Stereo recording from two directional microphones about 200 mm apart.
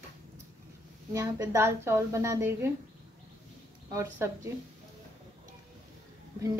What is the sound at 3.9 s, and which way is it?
Speech, 15° right (ahead or behind).